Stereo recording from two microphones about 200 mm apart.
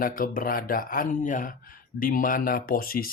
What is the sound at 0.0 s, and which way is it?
Speech, 45° left (ahead or behind).